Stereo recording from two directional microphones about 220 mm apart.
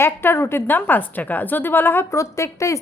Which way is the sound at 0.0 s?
10° left (ahead or behind).